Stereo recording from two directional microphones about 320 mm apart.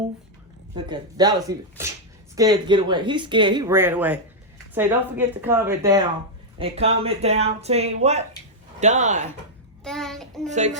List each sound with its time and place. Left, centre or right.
0.9 s speech: centre
9.8 s child singing: centre
10.5 s speech: right